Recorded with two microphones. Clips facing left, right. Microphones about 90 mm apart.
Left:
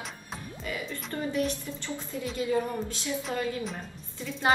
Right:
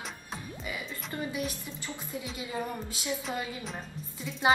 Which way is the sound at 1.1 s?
10° right (ahead or behind).